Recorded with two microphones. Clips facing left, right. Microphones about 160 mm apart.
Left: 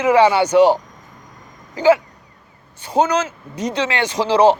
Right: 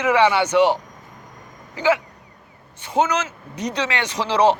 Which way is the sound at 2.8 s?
35° left (ahead or behind).